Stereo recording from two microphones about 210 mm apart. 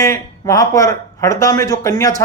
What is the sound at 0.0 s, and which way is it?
Speech, 15° left (ahead or behind).